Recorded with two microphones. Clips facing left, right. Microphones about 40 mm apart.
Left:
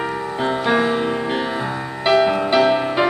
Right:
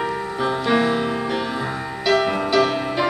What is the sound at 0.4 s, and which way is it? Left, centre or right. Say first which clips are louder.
Music: left 1 dB; centre.